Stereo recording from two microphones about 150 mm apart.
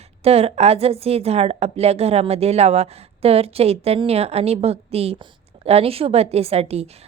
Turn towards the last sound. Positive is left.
turn(degrees=-45)  # may be behind; listen again after turning